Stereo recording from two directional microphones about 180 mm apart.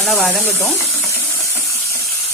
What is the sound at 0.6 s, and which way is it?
Sizzle, 15° left (ahead or behind).